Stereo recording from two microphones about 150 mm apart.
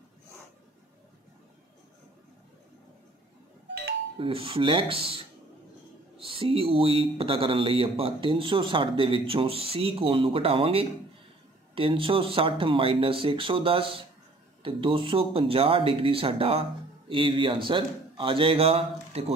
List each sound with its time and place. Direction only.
4.2 s speech: 35° right (ahead or behind)